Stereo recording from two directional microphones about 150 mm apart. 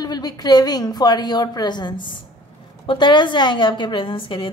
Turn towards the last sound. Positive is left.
turn(degrees=35)  # may be behind; listen again after turning